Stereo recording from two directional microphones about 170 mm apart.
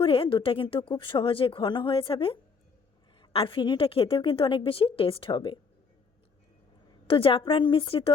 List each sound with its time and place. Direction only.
0.0 s a woman's voice: 30° left (ahead or behind)
7.1 s a woman's voice: 30° left (ahead or behind)